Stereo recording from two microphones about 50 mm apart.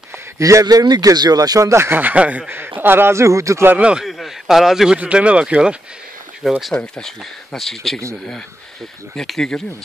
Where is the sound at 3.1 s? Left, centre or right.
Right.